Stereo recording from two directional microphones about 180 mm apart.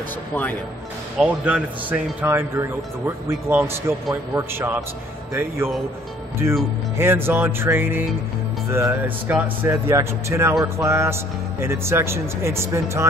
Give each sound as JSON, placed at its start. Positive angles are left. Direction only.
{"t": 1.2, "sound": "speech", "side_deg": -10}
{"t": 7.0, "sound": "speech", "side_deg": -10}